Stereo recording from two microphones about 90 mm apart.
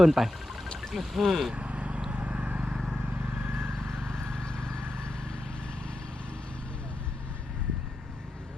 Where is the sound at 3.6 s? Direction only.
5° left (ahead or behind).